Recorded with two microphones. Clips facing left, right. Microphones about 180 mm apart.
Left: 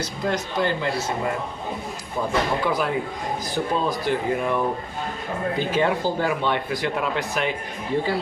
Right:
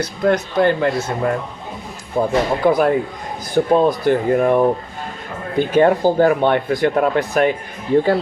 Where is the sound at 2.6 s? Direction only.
50° right (ahead or behind).